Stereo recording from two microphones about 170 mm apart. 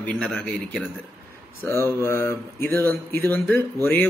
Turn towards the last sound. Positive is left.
turn(degrees=15)  # may be behind; listen again after turning